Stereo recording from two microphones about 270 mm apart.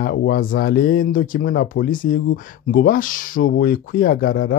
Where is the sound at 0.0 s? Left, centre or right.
Left.